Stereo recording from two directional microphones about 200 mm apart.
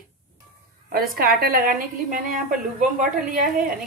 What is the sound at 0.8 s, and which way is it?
A woman's voice, 45° right (ahead or behind).